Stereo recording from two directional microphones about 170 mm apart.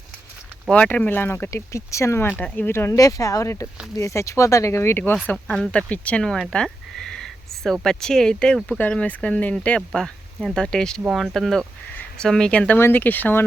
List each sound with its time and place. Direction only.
0.7 s speech: 5° left (ahead or behind)